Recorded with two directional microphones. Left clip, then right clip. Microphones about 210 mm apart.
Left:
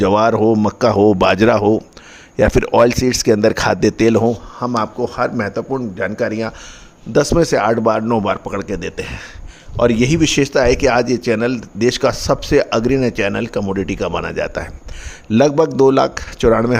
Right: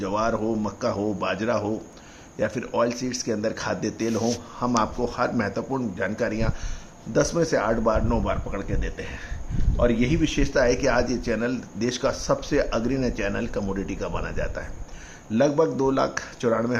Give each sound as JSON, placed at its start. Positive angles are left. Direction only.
{"t": 0.0, "sound": "a man's voice", "side_deg": 55}
{"t": 4.8, "sound": "a man's voice", "side_deg": 30}
{"t": 7.1, "sound": "a man's voice", "side_deg": 45}